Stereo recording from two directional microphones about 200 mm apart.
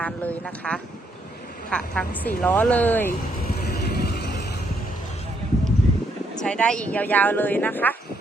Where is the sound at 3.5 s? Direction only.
50° left (ahead or behind).